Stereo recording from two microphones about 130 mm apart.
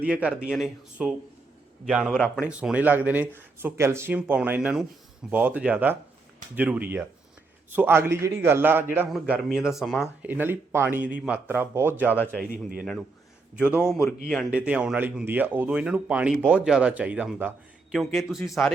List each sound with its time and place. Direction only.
0.0 s a man's voice: 10° right (ahead or behind)
2.4 s speech: 10° right (ahead or behind)
9.4 s a man's voice: centre (ahead or behind)
10.2 s speech: 15° right (ahead or behind)
12.4 s a man's voice: centre (ahead or behind)
14.5 s a man's voice: 10° right (ahead or behind)